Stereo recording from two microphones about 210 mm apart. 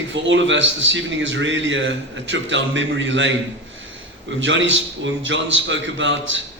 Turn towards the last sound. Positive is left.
turn(degrees=-60)  # may be behind; listen again after turning